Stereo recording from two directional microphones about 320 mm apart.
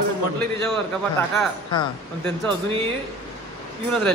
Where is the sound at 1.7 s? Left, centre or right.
Centre.